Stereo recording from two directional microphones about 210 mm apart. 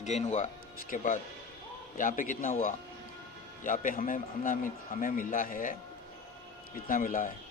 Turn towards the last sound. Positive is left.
turn(degrees=40)  # may be behind; listen again after turning